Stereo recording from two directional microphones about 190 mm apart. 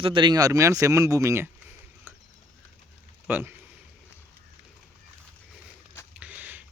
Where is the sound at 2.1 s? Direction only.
10° right (ahead or behind).